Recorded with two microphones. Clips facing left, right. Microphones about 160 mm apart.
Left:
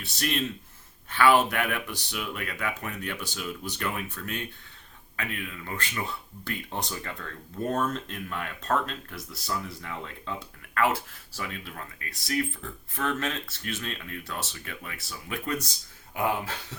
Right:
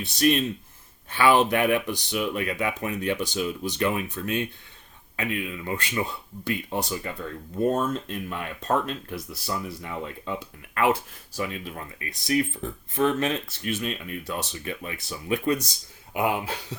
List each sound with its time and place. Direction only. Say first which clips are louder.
0.0 s speech: right 8 dB; 15° right (ahead or behind)